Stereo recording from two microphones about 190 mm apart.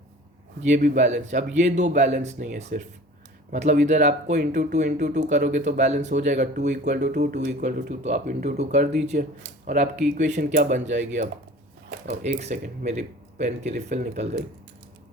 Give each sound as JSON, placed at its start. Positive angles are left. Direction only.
{"t": 0.6, "sound": "speech", "side_deg": -40}
{"t": 12.0, "sound": "speech", "side_deg": -35}